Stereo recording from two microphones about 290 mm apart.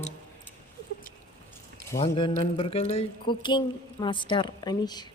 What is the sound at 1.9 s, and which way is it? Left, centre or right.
Speech, centre.